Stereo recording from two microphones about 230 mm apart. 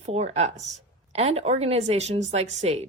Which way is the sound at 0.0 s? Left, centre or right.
Right.